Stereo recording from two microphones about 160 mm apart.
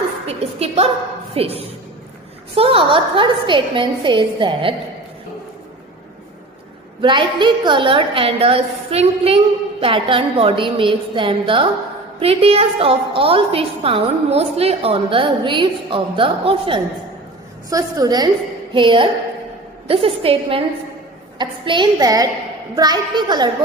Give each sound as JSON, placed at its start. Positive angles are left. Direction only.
{"t": 0.3, "sound": "a sound", "side_deg": -40}
{"t": 1.3, "sound": "a woman's voice", "side_deg": -35}
{"t": 7.0, "sound": "a woman's voice", "side_deg": -30}